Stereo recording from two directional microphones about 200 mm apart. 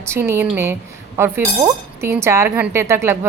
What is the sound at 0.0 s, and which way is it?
Speech, 15° right (ahead or behind).